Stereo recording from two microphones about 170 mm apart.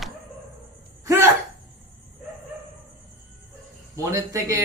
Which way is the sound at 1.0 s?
15° right (ahead or behind).